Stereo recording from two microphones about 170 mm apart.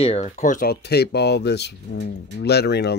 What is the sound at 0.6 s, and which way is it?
Speech, 70° left (ahead or behind).